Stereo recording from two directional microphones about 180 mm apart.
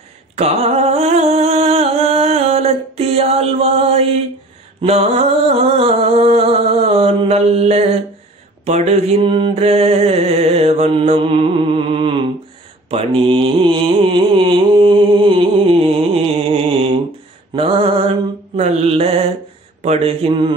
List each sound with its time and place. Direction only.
0.4 s music: 35° right (ahead or behind)
8.6 s mantra: 40° right (ahead or behind)
19.8 s a sound: 35° right (ahead or behind)